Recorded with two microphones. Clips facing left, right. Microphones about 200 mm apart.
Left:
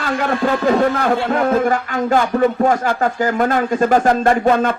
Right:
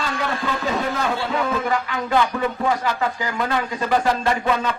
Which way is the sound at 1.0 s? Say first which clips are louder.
Left 6 dB; 55° left (ahead or behind).